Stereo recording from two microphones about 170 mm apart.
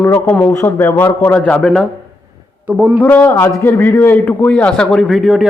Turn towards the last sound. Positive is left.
turn(degrees=0)  # may be behind; listen again after turning